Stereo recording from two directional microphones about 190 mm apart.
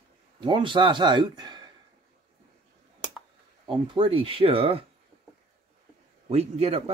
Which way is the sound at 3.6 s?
25° right (ahead or behind).